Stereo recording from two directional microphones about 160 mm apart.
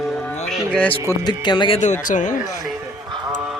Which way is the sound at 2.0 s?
55° left (ahead or behind).